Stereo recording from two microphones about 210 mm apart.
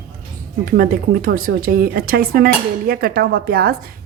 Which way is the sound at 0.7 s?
45° right (ahead or behind).